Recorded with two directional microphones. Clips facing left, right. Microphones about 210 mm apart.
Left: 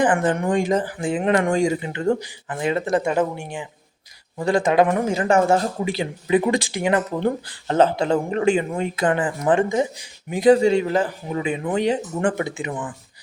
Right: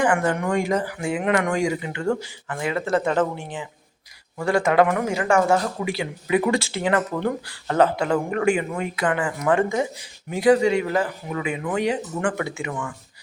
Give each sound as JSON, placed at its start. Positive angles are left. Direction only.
{"t": 0.5, "sound": "speech", "side_deg": 20}
{"t": 0.9, "sound": "speech", "side_deg": 35}
{"t": 6.5, "sound": "speech", "side_deg": 15}
{"t": 10.5, "sound": "speech", "side_deg": 30}